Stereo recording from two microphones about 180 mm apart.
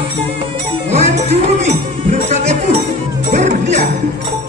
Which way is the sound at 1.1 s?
40° right (ahead or behind).